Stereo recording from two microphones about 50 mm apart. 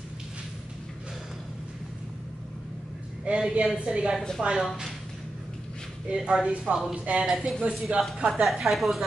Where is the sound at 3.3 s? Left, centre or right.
Right.